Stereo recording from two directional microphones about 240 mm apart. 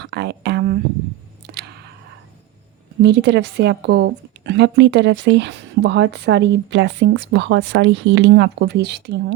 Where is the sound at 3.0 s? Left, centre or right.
Right.